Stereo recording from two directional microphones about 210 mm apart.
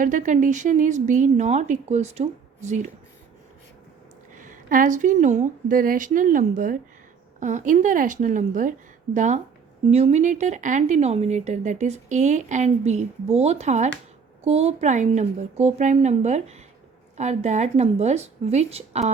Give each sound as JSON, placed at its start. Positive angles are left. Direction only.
{"t": 0.0, "sound": "speech", "side_deg": -40}
{"t": 4.4, "sound": "speech", "side_deg": -40}